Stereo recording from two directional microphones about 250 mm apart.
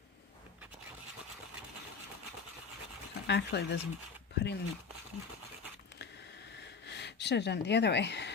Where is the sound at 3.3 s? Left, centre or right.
Left.